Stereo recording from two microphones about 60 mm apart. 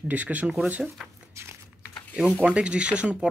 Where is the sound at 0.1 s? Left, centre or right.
Right.